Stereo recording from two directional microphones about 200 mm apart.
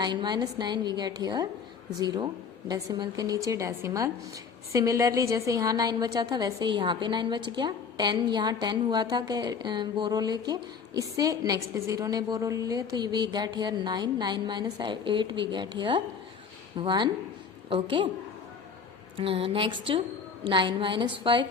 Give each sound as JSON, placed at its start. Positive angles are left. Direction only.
{"t": 0.0, "sound": "a woman's voice", "side_deg": -20}
{"t": 19.1, "sound": "a woman's voice", "side_deg": -25}